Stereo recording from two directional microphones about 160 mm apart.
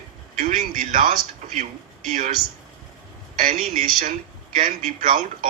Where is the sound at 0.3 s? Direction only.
60° right (ahead or behind).